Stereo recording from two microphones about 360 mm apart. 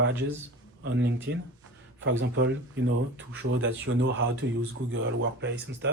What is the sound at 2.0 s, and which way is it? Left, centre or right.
Speech, right.